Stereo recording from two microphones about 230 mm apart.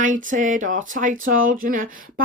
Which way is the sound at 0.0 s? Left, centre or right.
Right.